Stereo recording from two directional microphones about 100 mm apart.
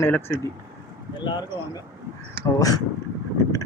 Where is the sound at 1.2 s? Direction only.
50° left (ahead or behind).